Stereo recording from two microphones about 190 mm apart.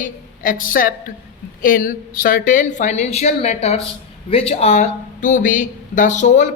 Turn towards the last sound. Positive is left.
turn(degrees=40)  # may be behind; listen again after turning